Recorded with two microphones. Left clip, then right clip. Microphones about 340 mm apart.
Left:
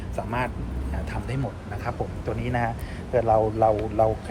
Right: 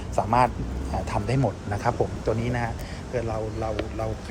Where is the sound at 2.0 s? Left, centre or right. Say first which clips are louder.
Right 5 dB; right.